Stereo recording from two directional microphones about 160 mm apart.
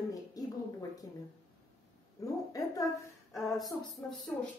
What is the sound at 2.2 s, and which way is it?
Speech, 20° left (ahead or behind).